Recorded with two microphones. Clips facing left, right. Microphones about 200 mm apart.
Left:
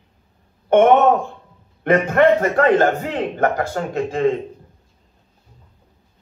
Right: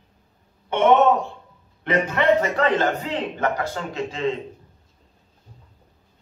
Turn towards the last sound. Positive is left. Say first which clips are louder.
# left 6 dB
turn(degrees=50)  # may be behind; listen again after turning